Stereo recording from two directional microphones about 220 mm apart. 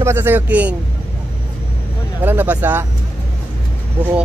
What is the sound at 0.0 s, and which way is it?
Speech, 10° right (ahead or behind).